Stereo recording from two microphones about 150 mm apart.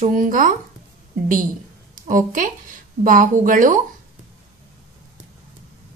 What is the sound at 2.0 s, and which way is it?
Speech, 60° right (ahead or behind).